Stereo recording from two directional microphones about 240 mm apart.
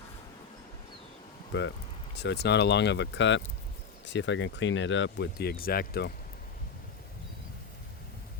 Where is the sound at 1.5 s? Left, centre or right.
Left.